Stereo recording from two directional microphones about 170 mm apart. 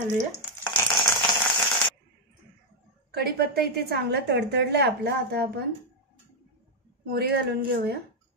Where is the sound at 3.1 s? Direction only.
70° right (ahead or behind).